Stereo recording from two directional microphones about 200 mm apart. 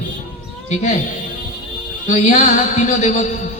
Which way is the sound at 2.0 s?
35° left (ahead or behind).